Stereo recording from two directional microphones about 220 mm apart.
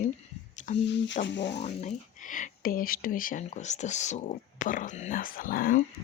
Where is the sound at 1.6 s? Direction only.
30° left (ahead or behind).